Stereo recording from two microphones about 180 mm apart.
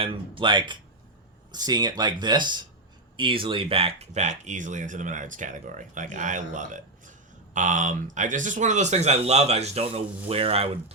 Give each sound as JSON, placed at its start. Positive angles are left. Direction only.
{"t": 0.0, "sound": "speech", "side_deg": -30}